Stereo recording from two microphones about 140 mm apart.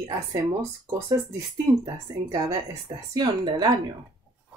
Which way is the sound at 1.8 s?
25° right (ahead or behind).